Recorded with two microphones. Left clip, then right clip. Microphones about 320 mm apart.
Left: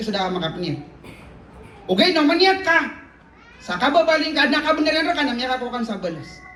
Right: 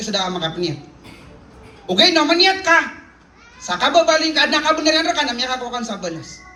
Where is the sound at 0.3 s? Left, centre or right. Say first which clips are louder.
Right 3 dB; centre.